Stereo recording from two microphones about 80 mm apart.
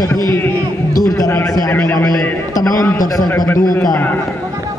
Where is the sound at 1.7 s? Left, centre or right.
Left.